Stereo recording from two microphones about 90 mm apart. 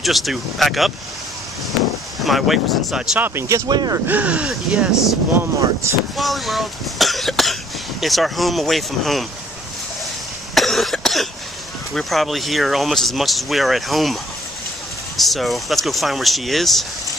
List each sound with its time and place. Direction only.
0.0 s speech: centre (ahead or behind)
2.2 s speech: centre (ahead or behind)
3.2 s speech: 25° right (ahead or behind)
3.6 s speech: 50° right (ahead or behind)
4.1 s speech: 15° right (ahead or behind)
6.1 s cough: centre (ahead or behind)
8.0 s speech: centre (ahead or behind)
10.5 s cough: centre (ahead or behind)
11.9 s speech: centre (ahead or behind)
15.1 s speech: centre (ahead or behind)